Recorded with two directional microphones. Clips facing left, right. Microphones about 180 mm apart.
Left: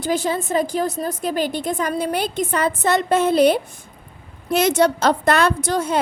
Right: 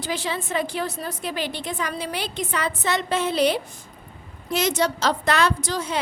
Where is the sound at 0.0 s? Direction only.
45° left (ahead or behind).